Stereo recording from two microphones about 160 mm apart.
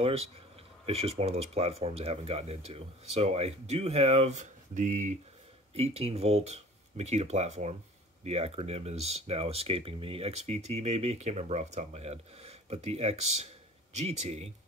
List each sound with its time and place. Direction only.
0.8 s speech: 40° right (ahead or behind)
5.8 s speech: 40° right (ahead or behind)